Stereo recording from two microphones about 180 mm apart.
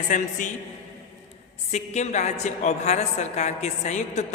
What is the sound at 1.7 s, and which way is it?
A woman's voice, 40° left (ahead or behind).